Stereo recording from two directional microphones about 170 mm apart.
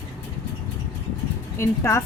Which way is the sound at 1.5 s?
15° left (ahead or behind).